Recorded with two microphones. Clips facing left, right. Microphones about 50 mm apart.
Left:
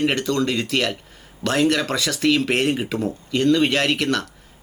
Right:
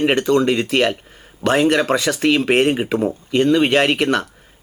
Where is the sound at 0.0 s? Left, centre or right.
Right.